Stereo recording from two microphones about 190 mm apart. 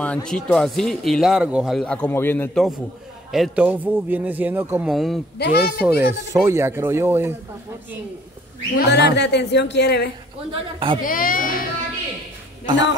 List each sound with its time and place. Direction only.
0.0 s speech: 5° left (ahead or behind)
3.3 s speech: centre (ahead or behind)
4.9 s speech: centre (ahead or behind)
5.4 s speech: 55° left (ahead or behind)
5.8 s speech: 10° right (ahead or behind)
8.7 s speech: 60° left (ahead or behind)
10.5 s a woman's voice: 25° right (ahead or behind)
11.0 s speech: 45° left (ahead or behind)